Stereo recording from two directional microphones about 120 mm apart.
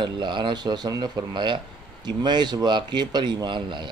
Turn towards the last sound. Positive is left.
turn(degrees=-40)  # may be behind; listen again after turning